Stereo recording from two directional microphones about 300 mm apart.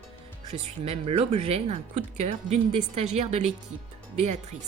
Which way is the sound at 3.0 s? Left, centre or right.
Right.